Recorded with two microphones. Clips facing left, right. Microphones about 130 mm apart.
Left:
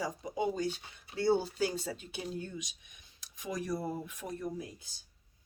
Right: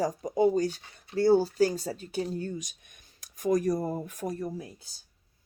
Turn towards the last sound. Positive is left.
turn(degrees=-40)  # may be behind; listen again after turning